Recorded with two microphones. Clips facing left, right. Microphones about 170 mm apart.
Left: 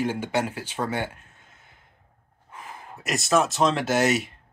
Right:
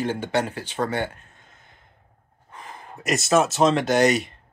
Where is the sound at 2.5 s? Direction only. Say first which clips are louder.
Right 1 dB; 5° left (ahead or behind).